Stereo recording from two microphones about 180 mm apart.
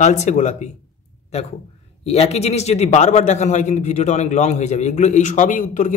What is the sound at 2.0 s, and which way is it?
A man's voice, 35° left (ahead or behind).